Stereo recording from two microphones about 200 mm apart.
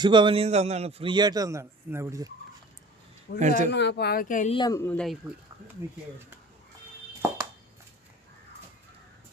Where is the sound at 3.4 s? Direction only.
35° right (ahead or behind).